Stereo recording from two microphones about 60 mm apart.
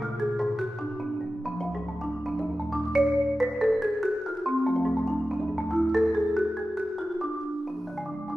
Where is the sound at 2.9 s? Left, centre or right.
Centre.